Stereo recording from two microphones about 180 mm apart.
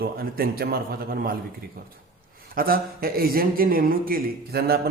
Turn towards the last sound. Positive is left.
turn(degrees=-60)  # may be behind; listen again after turning